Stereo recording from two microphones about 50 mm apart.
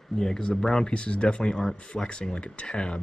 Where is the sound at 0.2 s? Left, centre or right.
Centre.